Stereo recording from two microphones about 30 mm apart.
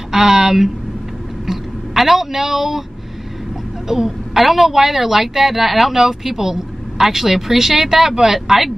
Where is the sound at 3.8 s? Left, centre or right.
Centre.